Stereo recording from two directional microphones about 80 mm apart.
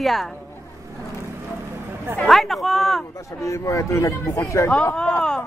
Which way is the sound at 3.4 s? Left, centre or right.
Left.